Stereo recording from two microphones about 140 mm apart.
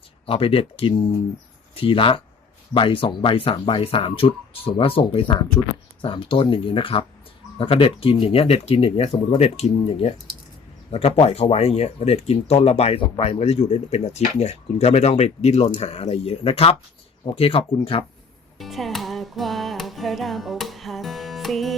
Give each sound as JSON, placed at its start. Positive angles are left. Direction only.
{"t": 0.3, "sound": "speech", "side_deg": 40}
{"t": 18.6, "sound": "music", "side_deg": 0}